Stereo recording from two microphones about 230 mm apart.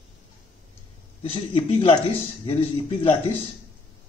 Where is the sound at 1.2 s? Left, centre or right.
Left.